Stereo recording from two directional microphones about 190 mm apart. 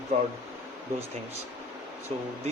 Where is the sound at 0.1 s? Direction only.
35° right (ahead or behind).